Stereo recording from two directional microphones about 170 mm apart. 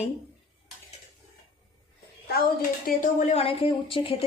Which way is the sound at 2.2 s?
60° left (ahead or behind).